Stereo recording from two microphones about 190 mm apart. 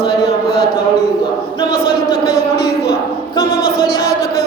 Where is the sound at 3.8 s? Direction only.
55° left (ahead or behind).